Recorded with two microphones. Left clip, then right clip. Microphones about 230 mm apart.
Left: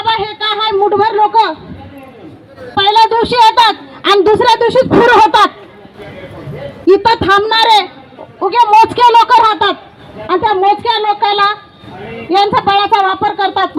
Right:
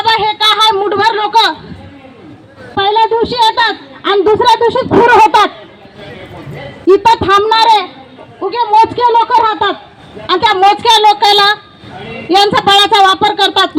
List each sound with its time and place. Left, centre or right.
0.0 s a sound: right
2.7 s a woman's voice: centre; by 5.5 s left
6.8 s a woman's voice: left
8.4 s a man's voice: left; by 9.7 s centre
10.2 s a woman's voice: right